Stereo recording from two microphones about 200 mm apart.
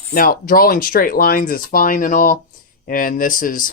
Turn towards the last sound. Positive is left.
turn(degrees=45)  # may be behind; listen again after turning